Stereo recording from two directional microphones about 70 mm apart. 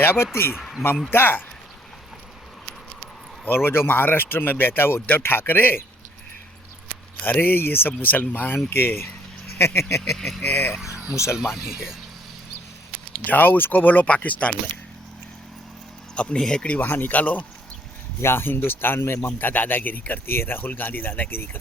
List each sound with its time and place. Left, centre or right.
0.0 s speech: left
3.4 s speech: left
7.2 s speech: left
10.2 s speech: centre
10.4 s speech: left
11.1 s speech: left
11.3 s speech: centre
13.2 s speech: left
16.1 s speech: centre
18.2 s speech: left